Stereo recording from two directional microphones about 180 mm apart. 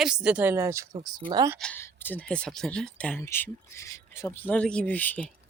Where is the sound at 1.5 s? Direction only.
10° left (ahead or behind).